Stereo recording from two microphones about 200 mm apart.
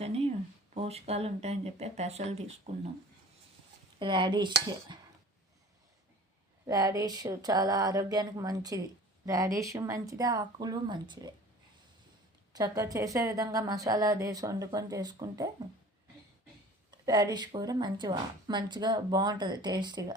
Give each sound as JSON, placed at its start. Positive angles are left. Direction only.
{"t": 0.7, "sound": "speech", "side_deg": -30}
{"t": 4.0, "sound": "a woman's voice", "side_deg": -20}
{"t": 6.7, "sound": "a woman's voice", "side_deg": -15}
{"t": 12.5, "sound": "a woman's voice", "side_deg": -20}
{"t": 17.1, "sound": "a woman's voice", "side_deg": -20}